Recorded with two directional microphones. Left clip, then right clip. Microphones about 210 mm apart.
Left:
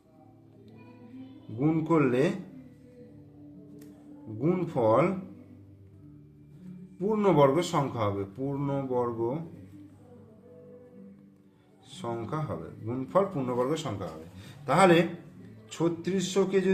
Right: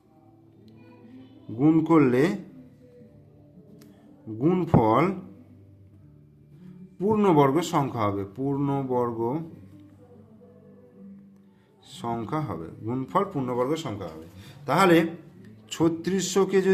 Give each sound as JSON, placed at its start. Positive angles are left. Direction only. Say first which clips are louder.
{"t": 1.5, "sound": "speech", "louder": "right 6 dB", "side_deg": -35}
{"t": 4.4, "sound": "speech", "louder": "right 5 dB", "side_deg": -40}
{"t": 7.0, "sound": "speech", "louder": "right 2 dB", "side_deg": -35}
{"t": 11.9, "sound": "speech", "louder": "right 4 dB", "side_deg": -35}
{"t": 15.7, "sound": "speech", "louder": "right 4 dB", "side_deg": -40}